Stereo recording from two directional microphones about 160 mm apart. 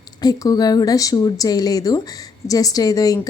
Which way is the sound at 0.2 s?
25° left (ahead or behind).